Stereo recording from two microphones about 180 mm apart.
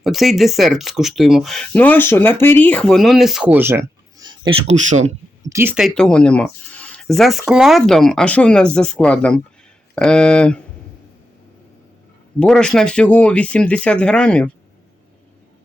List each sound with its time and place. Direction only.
0.0 s speech: centre (ahead or behind); by 4.5 s 25° right (ahead or behind)
4.6 s speech: 40° right (ahead or behind)
5.5 s speech: 15° right (ahead or behind)
5.7 s speech: centre (ahead or behind)
12.4 s speech: 5° left (ahead or behind)